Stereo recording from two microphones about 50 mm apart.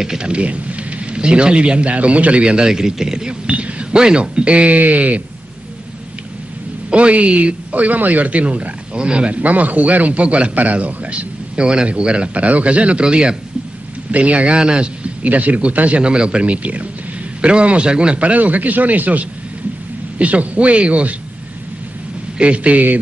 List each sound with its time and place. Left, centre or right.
0.0 s a man's voice: centre
0.3 s speech: right
3.4 s speech: right
6.9 s a man's voice: right
15.2 s speech: right
22.4 s speech: right